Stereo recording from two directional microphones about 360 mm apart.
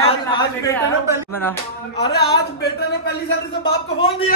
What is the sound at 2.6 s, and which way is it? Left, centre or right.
Speech, left.